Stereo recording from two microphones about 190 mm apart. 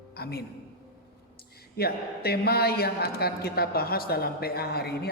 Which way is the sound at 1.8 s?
55° left (ahead or behind).